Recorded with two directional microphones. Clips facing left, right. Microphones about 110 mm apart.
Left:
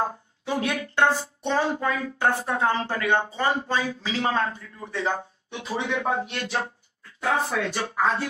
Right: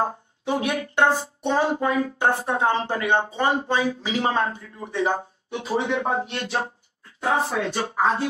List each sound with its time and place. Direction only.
0.0 s speech: 20° right (ahead or behind)
5.5 s speech: 35° right (ahead or behind)